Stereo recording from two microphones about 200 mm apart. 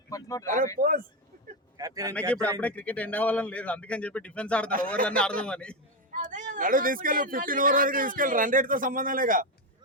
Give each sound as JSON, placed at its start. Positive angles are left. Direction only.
{"t": 0.1, "sound": "a man's voice", "side_deg": 15}
{"t": 0.8, "sound": "speech", "side_deg": -45}
{"t": 1.8, "sound": "speech", "side_deg": -15}
{"t": 2.6, "sound": "a man's voice", "side_deg": 5}
{"t": 6.1, "sound": "speech", "side_deg": -40}